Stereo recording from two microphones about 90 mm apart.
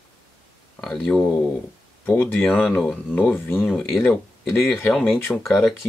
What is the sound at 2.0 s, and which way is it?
Speech, 20° left (ahead or behind).